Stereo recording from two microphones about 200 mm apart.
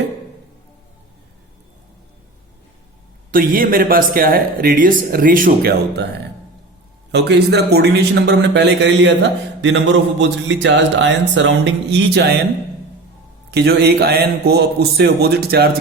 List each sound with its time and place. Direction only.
3.3 s speech: 45° right (ahead or behind)
7.1 s speech: 55° right (ahead or behind)
13.5 s speech: 55° right (ahead or behind)